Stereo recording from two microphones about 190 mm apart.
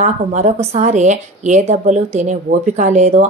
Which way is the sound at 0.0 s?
35° right (ahead or behind).